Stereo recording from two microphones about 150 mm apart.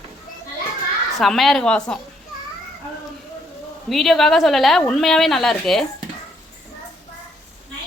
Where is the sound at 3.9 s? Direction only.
Centre (ahead or behind).